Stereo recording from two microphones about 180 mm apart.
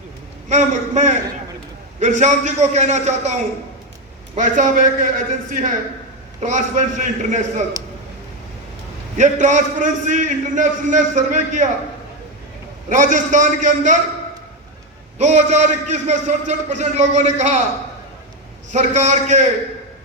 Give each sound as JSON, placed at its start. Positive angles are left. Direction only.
{"t": 0.4, "sound": "a man's voice", "side_deg": -40}
{"t": 4.4, "sound": "a man's voice", "side_deg": -45}
{"t": 9.1, "sound": "a man's voice", "side_deg": -40}
{"t": 12.9, "sound": "a man's voice", "side_deg": -45}
{"t": 15.2, "sound": "a man's voice", "side_deg": -40}
{"t": 18.7, "sound": "a man's voice", "side_deg": -40}